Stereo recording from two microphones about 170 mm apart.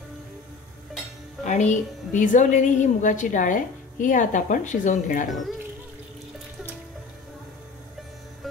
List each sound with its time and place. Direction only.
1.4 s a woman's voice: 45° left (ahead or behind)